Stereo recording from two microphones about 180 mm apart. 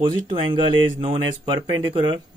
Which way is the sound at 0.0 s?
25° right (ahead or behind).